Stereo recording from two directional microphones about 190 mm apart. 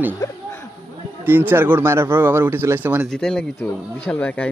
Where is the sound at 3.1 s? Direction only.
5° left (ahead or behind).